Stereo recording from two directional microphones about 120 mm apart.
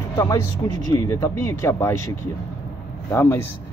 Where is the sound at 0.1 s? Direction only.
25° left (ahead or behind).